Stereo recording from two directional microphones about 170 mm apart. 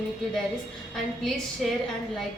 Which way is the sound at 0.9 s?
Centre (ahead or behind).